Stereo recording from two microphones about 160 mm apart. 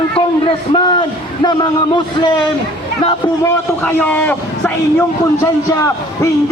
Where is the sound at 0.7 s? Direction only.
30° left (ahead or behind).